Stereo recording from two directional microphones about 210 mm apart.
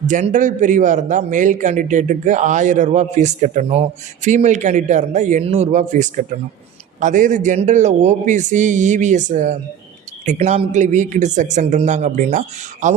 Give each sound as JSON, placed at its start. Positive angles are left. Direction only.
{"t": 0.0, "sound": "a man's voice", "side_deg": -35}